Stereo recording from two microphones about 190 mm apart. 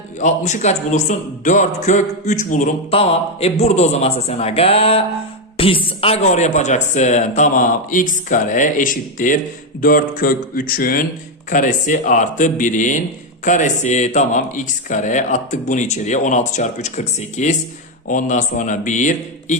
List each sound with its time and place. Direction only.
0.2 s a man's voice: 40° left (ahead or behind)